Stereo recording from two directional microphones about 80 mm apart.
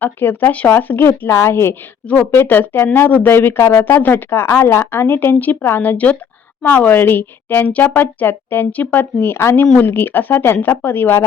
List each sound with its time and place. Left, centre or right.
0.0 s speech: left